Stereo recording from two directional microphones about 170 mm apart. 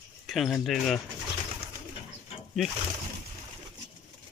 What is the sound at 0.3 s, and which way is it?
Speech, centre (ahead or behind).